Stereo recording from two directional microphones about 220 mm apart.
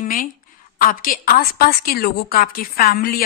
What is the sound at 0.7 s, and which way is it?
A woman's voice, 40° left (ahead or behind).